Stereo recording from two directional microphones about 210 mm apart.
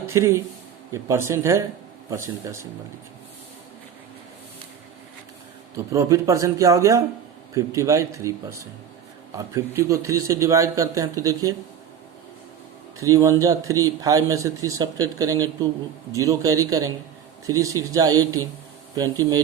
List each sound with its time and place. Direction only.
0.0 s a man's voice: 10° right (ahead or behind)
5.7 s speech: 15° right (ahead or behind)
13.0 s speech: 15° right (ahead or behind)